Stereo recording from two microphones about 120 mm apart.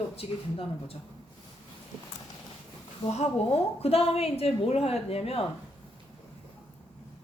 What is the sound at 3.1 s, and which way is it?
A woman's voice, 60° left (ahead or behind).